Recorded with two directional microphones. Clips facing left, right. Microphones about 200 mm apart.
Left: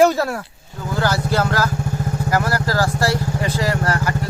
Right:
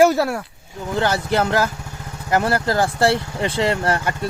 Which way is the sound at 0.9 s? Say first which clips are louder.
Even; 25° right (ahead or behind).